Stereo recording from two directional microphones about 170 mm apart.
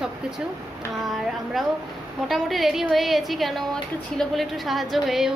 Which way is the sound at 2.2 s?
Centre (ahead or behind).